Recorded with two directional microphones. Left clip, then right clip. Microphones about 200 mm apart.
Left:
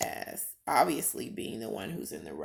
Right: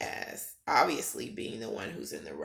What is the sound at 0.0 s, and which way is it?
Speech, 45° left (ahead or behind).